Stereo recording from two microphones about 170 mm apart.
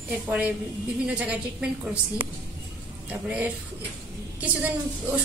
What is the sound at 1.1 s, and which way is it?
Speech, 5° right (ahead or behind).